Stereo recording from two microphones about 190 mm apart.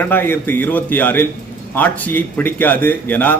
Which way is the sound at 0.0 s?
10° left (ahead or behind).